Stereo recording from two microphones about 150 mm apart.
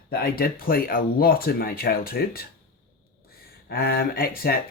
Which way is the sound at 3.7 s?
85° left.